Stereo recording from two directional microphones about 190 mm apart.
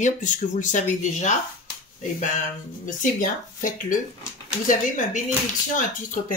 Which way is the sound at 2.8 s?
45° left (ahead or behind).